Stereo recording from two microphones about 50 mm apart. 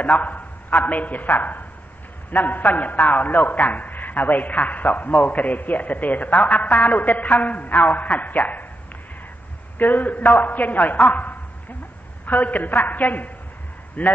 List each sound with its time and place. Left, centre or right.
0.0 s a man's voice: left
9.8 s a man's voice: left